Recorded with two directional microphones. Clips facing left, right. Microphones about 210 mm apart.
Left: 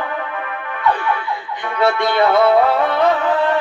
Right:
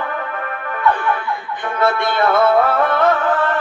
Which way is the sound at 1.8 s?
15° left (ahead or behind).